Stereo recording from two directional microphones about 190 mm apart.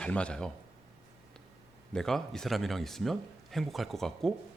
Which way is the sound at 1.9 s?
Centre (ahead or behind).